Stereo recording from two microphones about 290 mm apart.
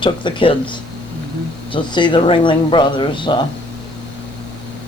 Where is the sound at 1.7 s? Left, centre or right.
Centre.